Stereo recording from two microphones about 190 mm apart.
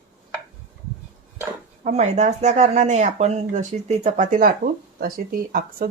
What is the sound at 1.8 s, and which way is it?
Speech, 35° right (ahead or behind).